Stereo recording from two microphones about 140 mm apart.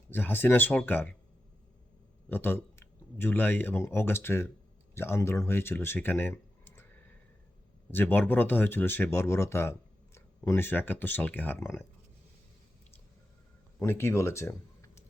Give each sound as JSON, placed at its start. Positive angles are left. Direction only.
{"t": 0.1, "sound": "speech", "side_deg": 15}
{"t": 2.3, "sound": "speech", "side_deg": 15}
{"t": 7.9, "sound": "speech", "side_deg": 15}
{"t": 13.7, "sound": "speech", "side_deg": 15}